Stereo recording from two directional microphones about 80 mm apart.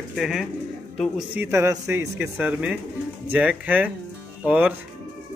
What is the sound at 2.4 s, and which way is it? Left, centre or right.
Speech, centre.